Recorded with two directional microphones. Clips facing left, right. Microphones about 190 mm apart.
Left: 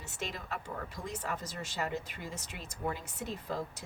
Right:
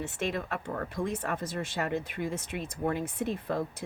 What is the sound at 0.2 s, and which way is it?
Speech, 60° right (ahead or behind).